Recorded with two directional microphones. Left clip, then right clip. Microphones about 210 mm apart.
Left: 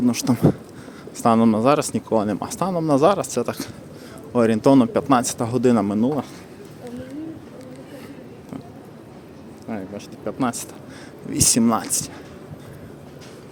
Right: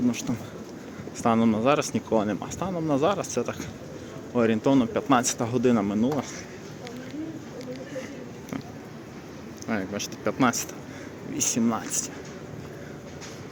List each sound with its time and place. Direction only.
0.1 s speech: 35° left (ahead or behind)
1.2 s speech: 25° left (ahead or behind)
9.6 s speech: centre (ahead or behind)
11.3 s speech: 90° left
11.6 s speech: 30° left (ahead or behind)